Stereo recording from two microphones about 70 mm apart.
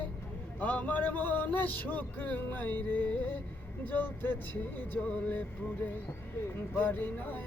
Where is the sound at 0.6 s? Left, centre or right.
Left.